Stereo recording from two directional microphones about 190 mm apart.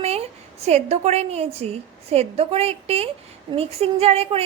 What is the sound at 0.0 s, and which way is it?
A woman's voice, 35° right (ahead or behind).